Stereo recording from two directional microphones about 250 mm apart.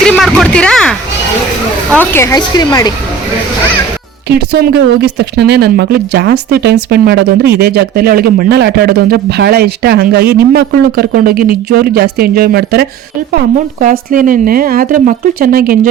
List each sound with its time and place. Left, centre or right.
0.0 s a sound: centre
1.9 s speech: centre
4.3 s speech: right